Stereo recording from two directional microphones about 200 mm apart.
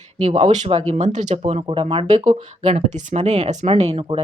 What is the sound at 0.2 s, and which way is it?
Speech, 30° right (ahead or behind).